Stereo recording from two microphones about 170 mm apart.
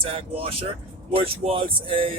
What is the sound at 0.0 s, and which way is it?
Speech, 35° right (ahead or behind).